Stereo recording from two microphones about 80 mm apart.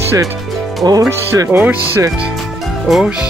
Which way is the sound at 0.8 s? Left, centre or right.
Right.